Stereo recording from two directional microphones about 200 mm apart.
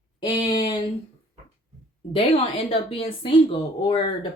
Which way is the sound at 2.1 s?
30° left (ahead or behind).